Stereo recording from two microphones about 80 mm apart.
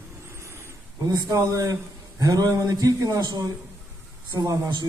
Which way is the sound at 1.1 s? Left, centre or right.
Right.